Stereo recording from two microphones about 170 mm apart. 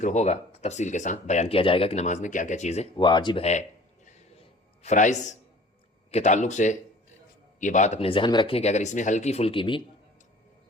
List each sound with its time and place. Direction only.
0.0 s speech: 45° left (ahead or behind)
2.9 s speech: 25° left (ahead or behind)
3.4 s a sound: 45° left (ahead or behind)
4.8 s speech: 45° left (ahead or behind)